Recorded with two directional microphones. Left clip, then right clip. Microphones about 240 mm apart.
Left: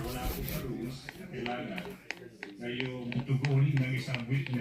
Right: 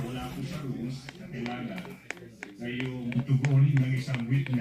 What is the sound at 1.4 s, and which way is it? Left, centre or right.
Speech, right.